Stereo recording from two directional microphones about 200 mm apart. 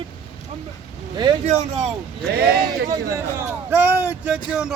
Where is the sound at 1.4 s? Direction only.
35° right (ahead or behind).